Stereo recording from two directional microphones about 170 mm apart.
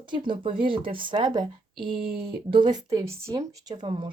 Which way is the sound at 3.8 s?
30° right (ahead or behind).